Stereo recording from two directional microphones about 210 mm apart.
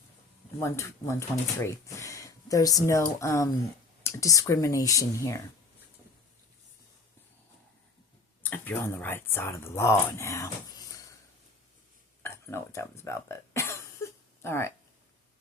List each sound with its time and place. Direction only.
0.6 s speech: 15° left (ahead or behind)
8.4 s speech: 10° left (ahead or behind)
12.2 s a sound: 10° left (ahead or behind)